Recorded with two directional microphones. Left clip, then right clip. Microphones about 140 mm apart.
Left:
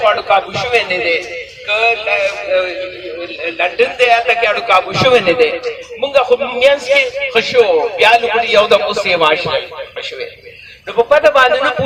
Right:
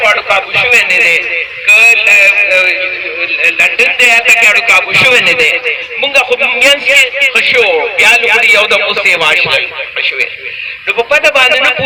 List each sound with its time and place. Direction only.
0.0 s a man's voice: 5° left (ahead or behind); by 11.7 s 40° left (ahead or behind)